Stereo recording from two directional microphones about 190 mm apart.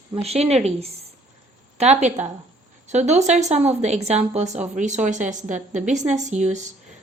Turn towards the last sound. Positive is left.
turn(degrees=-40)  # may be behind; listen again after turning